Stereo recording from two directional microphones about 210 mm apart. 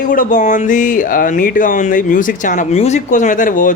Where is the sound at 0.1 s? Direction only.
40° left (ahead or behind).